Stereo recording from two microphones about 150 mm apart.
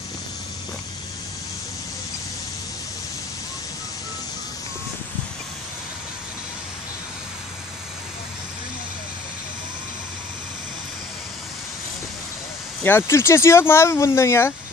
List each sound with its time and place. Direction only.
12.8 s speech: 15° left (ahead or behind)